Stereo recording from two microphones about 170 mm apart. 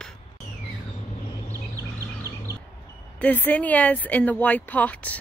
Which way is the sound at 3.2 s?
10° left (ahead or behind).